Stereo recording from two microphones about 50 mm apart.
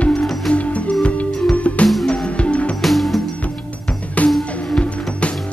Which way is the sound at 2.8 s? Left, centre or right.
Centre.